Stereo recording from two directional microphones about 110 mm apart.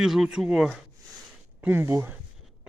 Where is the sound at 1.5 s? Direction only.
20° right (ahead or behind).